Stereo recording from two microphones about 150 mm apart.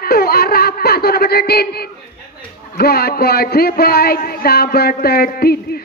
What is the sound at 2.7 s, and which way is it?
Speech, 90° left.